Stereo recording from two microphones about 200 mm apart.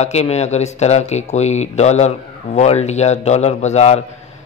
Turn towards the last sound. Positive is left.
turn(degrees=35)  # may be behind; listen again after turning